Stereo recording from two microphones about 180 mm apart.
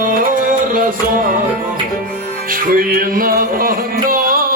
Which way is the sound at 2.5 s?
55° right (ahead or behind).